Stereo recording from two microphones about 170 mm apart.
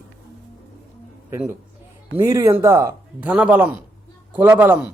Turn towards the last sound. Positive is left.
turn(degrees=-10)  # may be behind; listen again after turning